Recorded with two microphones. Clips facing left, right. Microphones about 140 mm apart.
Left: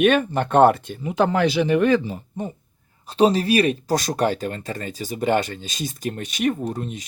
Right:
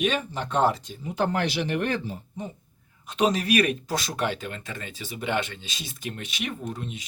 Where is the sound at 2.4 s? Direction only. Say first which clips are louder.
Left 7 dB; 55° left (ahead or behind).